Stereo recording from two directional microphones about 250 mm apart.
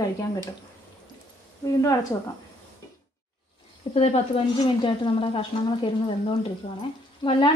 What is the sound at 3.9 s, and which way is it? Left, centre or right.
A woman's voice, left.